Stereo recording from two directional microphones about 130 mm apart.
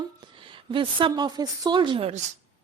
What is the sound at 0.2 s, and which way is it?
A woman's voice, 40° right (ahead or behind).